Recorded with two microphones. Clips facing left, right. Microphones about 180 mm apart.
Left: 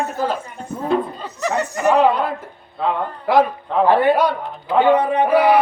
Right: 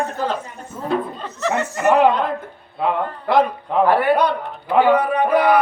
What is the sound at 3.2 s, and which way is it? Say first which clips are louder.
Speech: left 1 dB; 5° left (ahead or behind).